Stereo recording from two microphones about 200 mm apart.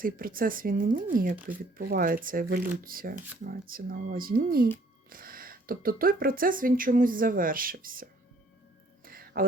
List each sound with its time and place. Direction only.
0.0 s speech: 45° right (ahead or behind)
9.0 s music: 45° right (ahead or behind)